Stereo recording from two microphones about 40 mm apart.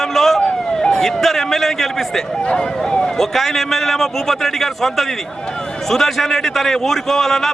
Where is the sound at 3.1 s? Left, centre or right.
Centre.